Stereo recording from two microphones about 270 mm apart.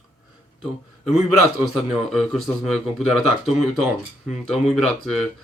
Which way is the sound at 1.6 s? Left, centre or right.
Centre.